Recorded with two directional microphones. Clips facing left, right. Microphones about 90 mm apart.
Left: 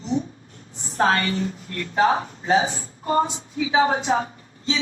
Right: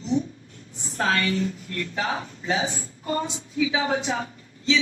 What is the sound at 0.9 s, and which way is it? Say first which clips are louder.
A woman's voice: left 3 dB; 40° left (ahead or behind).